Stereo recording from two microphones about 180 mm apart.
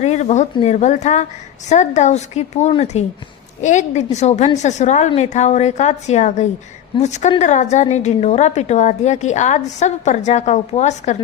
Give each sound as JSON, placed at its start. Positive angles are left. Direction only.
{"t": 0.0, "sound": "a woman's voice", "side_deg": 40}